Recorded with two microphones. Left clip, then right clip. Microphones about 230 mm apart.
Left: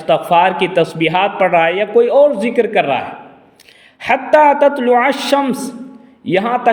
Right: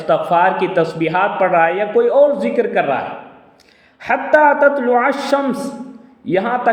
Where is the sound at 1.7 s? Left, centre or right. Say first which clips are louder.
Left 2 dB; left.